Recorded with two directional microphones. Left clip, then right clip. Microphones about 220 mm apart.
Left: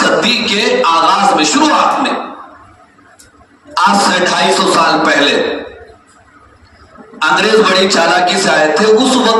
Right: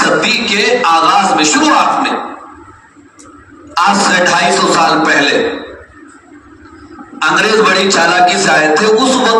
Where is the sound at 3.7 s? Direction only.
20° left (ahead or behind).